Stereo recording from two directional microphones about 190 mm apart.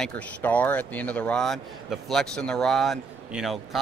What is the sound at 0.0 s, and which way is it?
Speech, 10° left (ahead or behind).